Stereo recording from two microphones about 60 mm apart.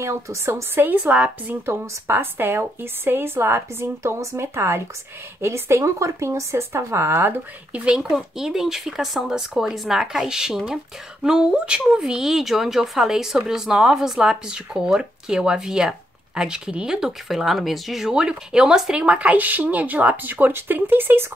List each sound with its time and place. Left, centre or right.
0.0 s a woman's voice: right
0.9 s a woman's voice: right
1.7 s a woman's voice: right
7.7 s a woman's voice: centre
8.1 s speech: centre
19.0 s speech: right